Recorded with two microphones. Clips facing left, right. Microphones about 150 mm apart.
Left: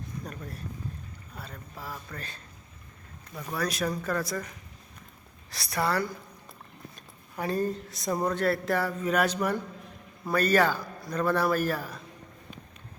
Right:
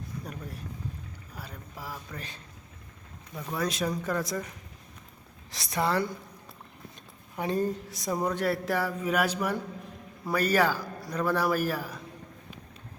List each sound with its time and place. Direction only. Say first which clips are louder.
1.4 s speech: even; 10° right (ahead or behind)
3.5 s speech: even; 20° right (ahead or behind)
5.7 s speech: right 1 dB; 20° right (ahead or behind)
7.3 s speech: even; 20° right (ahead or behind)